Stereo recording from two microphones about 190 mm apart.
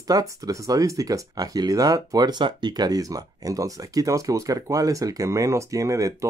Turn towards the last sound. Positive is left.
turn(degrees=-15)  # may be behind; listen again after turning